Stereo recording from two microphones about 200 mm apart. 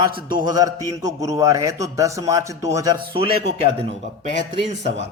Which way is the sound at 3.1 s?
30° right (ahead or behind).